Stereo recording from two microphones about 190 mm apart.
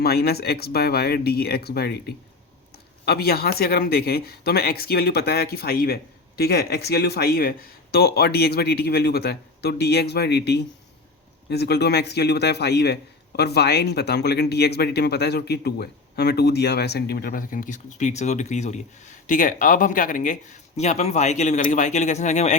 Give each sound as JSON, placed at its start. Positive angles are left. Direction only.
{"t": 0.0, "sound": "a man's voice", "side_deg": 55}